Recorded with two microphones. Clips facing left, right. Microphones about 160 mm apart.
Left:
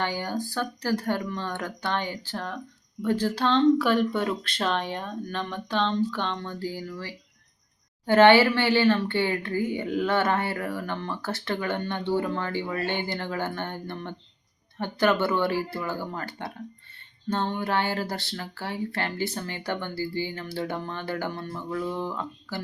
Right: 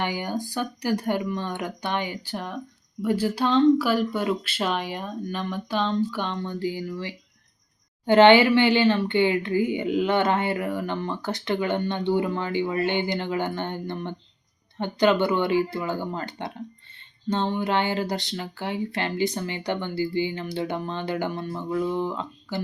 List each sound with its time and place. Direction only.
0.0 s speech: 15° right (ahead or behind)